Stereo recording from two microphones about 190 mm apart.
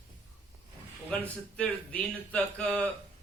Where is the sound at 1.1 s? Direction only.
5° left (ahead or behind).